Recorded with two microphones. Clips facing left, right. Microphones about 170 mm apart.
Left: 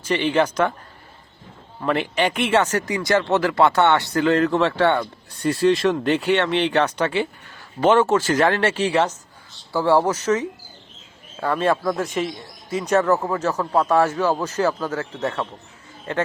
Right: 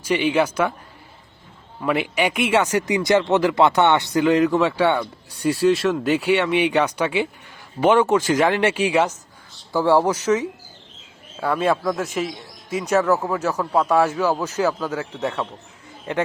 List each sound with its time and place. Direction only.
0.0 s speech: 10° right (ahead or behind)
1.8 s a man's voice: 10° right (ahead or behind)